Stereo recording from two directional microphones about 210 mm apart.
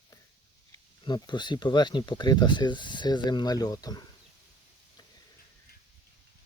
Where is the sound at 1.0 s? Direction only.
20° left (ahead or behind).